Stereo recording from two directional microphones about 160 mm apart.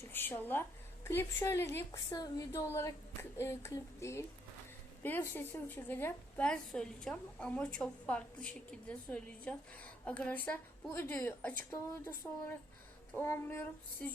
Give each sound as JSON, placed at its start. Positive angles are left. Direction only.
{"t": 0.1, "sound": "a sound", "side_deg": 10}
{"t": 1.0, "sound": "a woman's voice", "side_deg": 15}
{"t": 13.1, "sound": "a woman's voice", "side_deg": 15}